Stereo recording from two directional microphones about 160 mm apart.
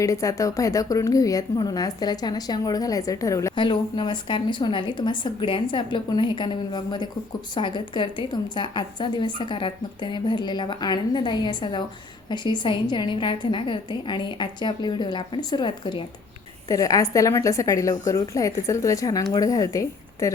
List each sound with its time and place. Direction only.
0.0 s a woman's voice: 20° left (ahead or behind)